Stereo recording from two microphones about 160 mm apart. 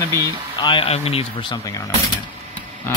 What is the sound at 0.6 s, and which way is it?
Speech, 35° left (ahead or behind).